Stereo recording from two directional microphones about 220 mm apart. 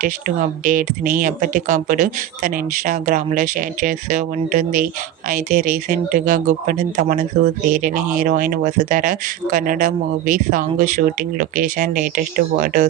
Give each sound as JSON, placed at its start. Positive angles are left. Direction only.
{"t": 0.0, "sound": "speech", "side_deg": -40}